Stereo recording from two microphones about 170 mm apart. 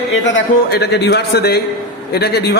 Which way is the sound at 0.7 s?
75° left (ahead or behind).